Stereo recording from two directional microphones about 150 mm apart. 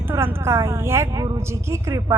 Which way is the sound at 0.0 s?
15° right (ahead or behind).